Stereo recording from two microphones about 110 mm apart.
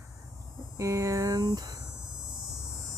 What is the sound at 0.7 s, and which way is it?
Speech, 30° right (ahead or behind).